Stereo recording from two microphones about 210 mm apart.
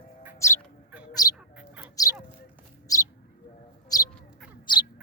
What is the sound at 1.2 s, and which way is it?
Bird, 20° left (ahead or behind).